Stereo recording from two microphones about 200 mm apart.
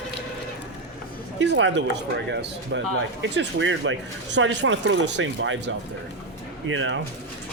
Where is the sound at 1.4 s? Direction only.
65° right (ahead or behind).